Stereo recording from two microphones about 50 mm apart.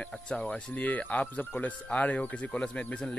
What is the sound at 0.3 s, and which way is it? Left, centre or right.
Speech, left.